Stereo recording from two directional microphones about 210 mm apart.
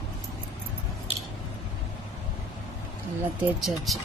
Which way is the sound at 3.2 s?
Centre (ahead or behind).